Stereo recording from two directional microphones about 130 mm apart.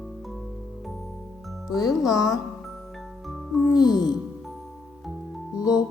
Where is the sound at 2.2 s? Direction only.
30° left (ahead or behind).